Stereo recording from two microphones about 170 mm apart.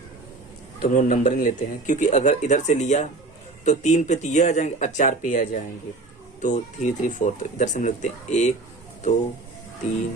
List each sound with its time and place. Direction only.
0.8 s a man's voice: 50° left (ahead or behind)